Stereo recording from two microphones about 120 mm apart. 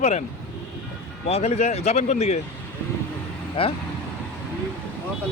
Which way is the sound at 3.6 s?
50° left (ahead or behind).